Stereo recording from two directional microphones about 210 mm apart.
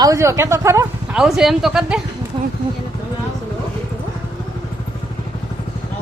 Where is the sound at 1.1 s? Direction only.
Centre (ahead or behind).